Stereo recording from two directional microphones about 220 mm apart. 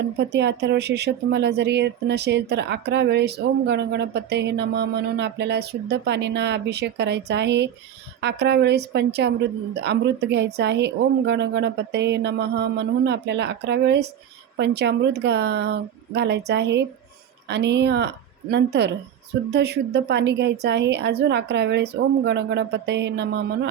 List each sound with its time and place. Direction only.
0.3 s speech: 50° right (ahead or behind)